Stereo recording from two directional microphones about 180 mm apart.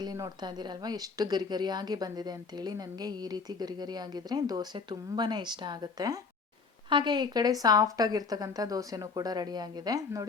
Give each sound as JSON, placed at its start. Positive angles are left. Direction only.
{"t": 0.0, "sound": "a woman's voice", "side_deg": -20}